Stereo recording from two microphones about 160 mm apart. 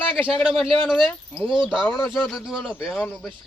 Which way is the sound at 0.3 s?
5° left (ahead or behind).